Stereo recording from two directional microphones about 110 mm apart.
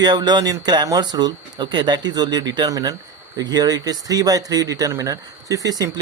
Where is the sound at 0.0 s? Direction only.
40° right (ahead or behind).